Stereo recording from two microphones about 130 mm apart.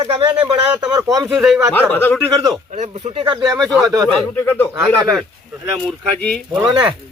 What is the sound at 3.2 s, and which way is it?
Speech, 35° right (ahead or behind).